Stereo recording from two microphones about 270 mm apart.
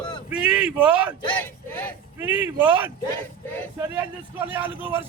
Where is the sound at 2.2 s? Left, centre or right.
Centre.